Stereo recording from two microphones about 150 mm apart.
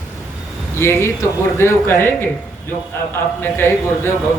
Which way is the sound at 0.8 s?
15° left (ahead or behind).